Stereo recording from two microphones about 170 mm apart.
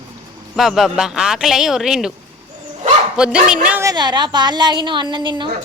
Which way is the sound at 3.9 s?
25° right (ahead or behind).